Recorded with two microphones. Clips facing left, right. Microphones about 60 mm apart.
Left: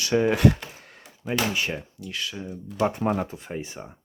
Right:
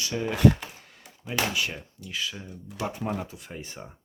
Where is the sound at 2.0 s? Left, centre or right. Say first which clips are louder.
Right 3 dB; centre.